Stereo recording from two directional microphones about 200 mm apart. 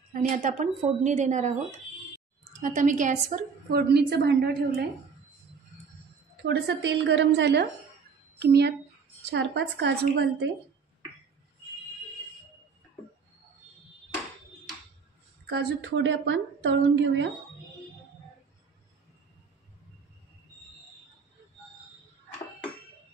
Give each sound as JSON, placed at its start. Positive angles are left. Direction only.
{"t": 0.1, "sound": "a woman's voice", "side_deg": -40}
{"t": 2.6, "sound": "a woman's voice", "side_deg": -40}
{"t": 6.4, "sound": "a woman's voice", "side_deg": -60}
{"t": 15.4, "sound": "a woman's voice", "side_deg": -60}